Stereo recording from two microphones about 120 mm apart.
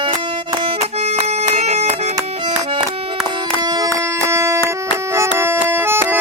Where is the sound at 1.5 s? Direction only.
65° right (ahead or behind).